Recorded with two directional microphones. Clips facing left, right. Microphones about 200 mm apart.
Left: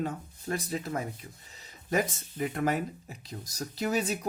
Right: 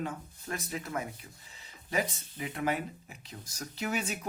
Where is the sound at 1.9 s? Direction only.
45° left (ahead or behind).